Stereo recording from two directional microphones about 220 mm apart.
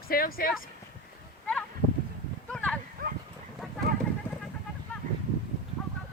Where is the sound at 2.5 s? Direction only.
5° left (ahead or behind).